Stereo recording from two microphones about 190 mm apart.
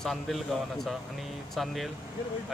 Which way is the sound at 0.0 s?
Centre (ahead or behind).